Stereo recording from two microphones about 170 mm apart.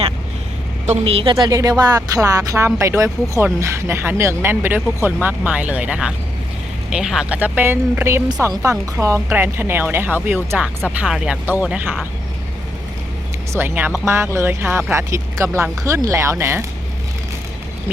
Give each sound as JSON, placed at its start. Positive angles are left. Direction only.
{"t": 0.9, "sound": "a woman's voice", "side_deg": -35}
{"t": 1.5, "sound": "speech", "side_deg": -20}
{"t": 10.8, "sound": "speech", "side_deg": 0}
{"t": 13.5, "sound": "speech", "side_deg": -15}